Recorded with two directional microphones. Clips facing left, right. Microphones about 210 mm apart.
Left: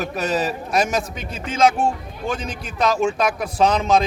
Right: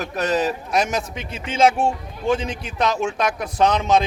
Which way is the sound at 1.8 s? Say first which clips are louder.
Right 1 dB; 25° right (ahead or behind).